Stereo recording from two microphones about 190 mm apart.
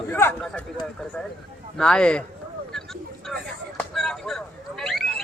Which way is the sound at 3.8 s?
Centre (ahead or behind).